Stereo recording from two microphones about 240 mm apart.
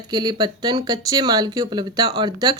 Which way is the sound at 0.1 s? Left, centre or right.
Centre.